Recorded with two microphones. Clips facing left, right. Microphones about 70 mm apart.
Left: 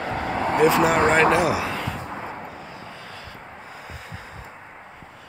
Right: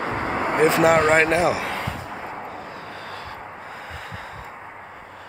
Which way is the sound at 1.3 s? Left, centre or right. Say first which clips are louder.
Even; right.